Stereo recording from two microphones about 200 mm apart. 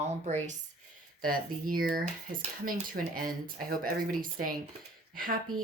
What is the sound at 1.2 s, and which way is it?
Speech, 45° right (ahead or behind).